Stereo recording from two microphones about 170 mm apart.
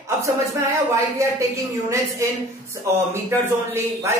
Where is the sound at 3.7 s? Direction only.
15° right (ahead or behind).